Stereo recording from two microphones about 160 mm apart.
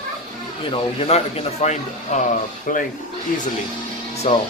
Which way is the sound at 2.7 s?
55° left (ahead or behind).